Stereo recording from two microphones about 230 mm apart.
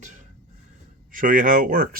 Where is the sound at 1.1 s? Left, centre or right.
Right.